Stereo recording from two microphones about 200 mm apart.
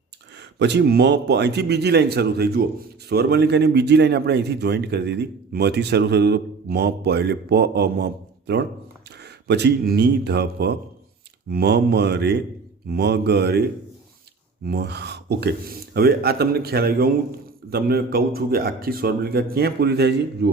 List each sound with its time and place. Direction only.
0.6 s a man's voice: 60° right (ahead or behind)